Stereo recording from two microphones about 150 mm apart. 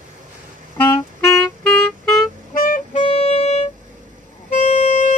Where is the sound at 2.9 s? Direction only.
45° left (ahead or behind).